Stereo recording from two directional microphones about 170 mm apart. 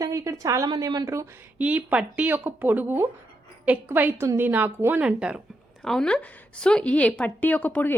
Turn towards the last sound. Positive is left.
turn(degrees=10)  # may be behind; listen again after turning